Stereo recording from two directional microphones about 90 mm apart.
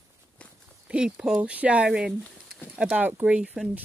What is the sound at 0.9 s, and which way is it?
Speech, 10° right (ahead or behind).